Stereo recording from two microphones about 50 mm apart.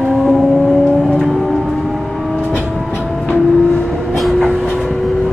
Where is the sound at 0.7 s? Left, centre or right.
Centre.